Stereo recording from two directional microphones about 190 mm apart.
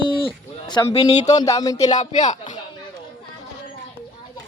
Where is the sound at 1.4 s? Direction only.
20° left (ahead or behind).